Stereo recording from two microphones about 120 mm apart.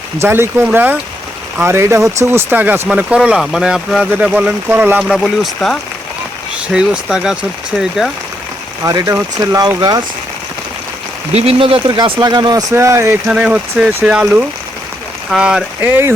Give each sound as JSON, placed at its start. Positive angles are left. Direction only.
{"t": 0.2, "sound": "speech", "side_deg": -20}
{"t": 5.0, "sound": "speech", "side_deg": 0}
{"t": 6.7, "sound": "speech", "side_deg": -5}
{"t": 8.8, "sound": "speech", "side_deg": -30}
{"t": 11.3, "sound": "speech", "side_deg": -50}
{"t": 13.2, "sound": "speech", "side_deg": -10}